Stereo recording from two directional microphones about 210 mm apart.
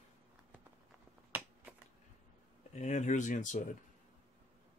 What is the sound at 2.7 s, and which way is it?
Speech, 35° left (ahead or behind).